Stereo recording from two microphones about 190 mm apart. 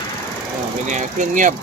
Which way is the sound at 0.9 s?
40° right (ahead or behind).